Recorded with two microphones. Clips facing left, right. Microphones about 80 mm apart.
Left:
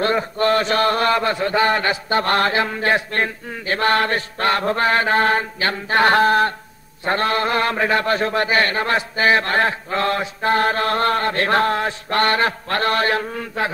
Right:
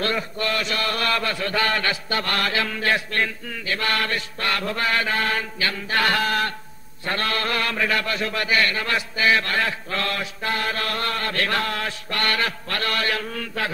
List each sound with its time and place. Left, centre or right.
0.0 s a man's voice: left